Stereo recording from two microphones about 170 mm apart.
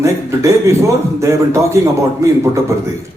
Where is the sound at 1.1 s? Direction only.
15° right (ahead or behind).